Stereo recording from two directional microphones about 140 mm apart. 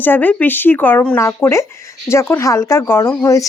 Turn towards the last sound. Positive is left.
turn(degrees=20)  # may be behind; listen again after turning